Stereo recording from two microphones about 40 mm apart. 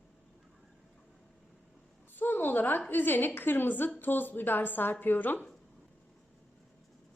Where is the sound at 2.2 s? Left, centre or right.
Left.